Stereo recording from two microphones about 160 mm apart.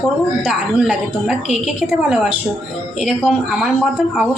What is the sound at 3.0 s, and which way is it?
A woman's voice, 5° right (ahead or behind).